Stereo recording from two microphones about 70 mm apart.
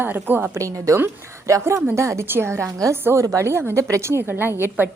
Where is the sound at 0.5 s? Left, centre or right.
Right.